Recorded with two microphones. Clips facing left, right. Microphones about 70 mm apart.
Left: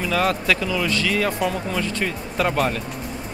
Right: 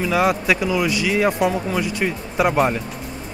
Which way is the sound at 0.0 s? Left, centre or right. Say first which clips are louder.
Right 3 dB; centre.